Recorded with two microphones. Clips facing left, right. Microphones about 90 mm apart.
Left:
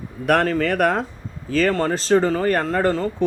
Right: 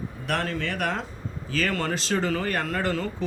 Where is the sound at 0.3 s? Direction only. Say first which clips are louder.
Left 10 dB; 55° left (ahead or behind).